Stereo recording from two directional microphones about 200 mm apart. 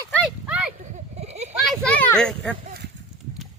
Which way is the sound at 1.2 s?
35° right (ahead or behind).